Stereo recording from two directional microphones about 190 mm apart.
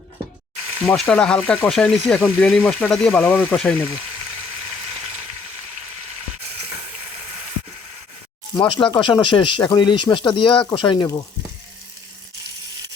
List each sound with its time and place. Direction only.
0.9 s speech: 5° left (ahead or behind)
8.5 s speech: 25° left (ahead or behind)